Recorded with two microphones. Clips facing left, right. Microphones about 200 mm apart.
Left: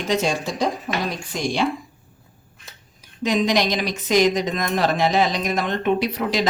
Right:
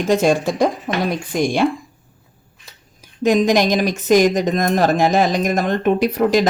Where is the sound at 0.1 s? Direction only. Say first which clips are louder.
Right 6 dB; 55° right (ahead or behind).